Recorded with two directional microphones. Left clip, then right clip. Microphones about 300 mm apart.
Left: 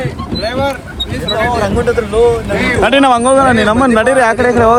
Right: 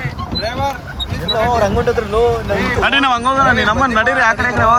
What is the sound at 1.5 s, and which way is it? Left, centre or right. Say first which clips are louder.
Speech: even; right.